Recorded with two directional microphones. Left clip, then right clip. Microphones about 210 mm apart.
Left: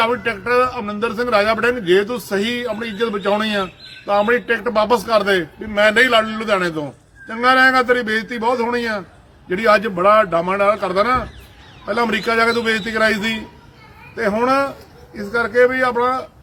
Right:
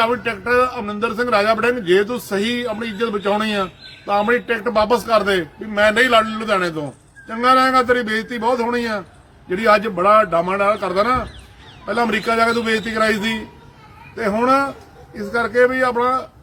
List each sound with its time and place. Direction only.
0.0 s a man's voice: centre (ahead or behind)